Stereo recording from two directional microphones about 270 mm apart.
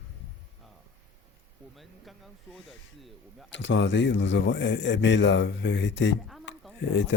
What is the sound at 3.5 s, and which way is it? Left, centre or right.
Speech, left.